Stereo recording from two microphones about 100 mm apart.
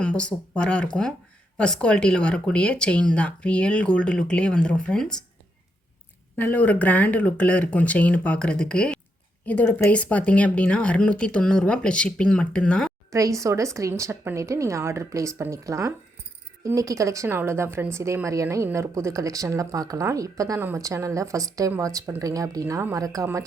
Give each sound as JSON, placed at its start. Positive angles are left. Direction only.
{"t": 0.0, "sound": "speech", "side_deg": 10}
{"t": 6.3, "sound": "speech", "side_deg": 20}
{"t": 13.1, "sound": "a woman's voice", "side_deg": -35}